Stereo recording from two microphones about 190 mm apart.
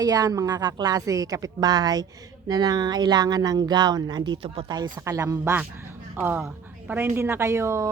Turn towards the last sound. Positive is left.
turn(degrees=-15)  # may be behind; listen again after turning